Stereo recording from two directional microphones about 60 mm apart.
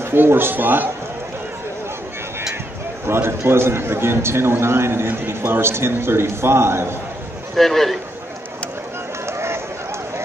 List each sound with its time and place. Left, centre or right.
0.0 s a man's voice: right
3.1 s a man's voice: right
7.5 s a man's voice: centre
9.2 s a sound: right